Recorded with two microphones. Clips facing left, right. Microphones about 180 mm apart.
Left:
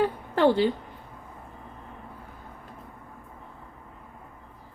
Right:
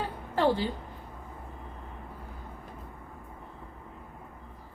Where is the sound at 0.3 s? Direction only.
70° left (ahead or behind).